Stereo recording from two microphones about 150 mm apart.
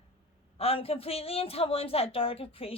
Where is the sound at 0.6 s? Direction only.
40° left (ahead or behind).